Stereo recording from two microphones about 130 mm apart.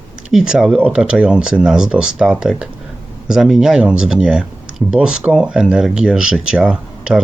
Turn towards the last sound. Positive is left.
turn(degrees=-5)  # may be behind; listen again after turning